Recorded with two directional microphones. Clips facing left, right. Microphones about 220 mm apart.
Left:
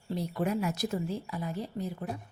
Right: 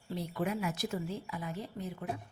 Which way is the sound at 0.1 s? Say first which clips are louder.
Left 4 dB; 40° left (ahead or behind).